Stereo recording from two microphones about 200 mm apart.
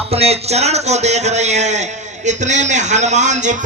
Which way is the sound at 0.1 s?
30° right (ahead or behind).